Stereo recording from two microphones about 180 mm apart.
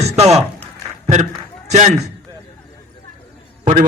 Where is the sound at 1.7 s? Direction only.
40° right (ahead or behind).